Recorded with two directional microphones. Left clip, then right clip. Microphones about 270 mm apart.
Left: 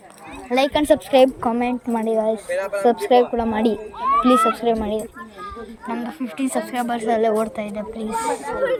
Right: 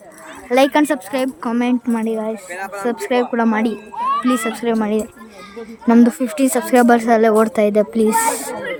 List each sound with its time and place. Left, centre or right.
0.5 s speech: centre
5.9 s a woman's voice: right